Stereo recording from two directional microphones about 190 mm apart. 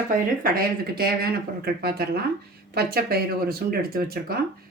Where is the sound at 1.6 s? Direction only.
55° right (ahead or behind).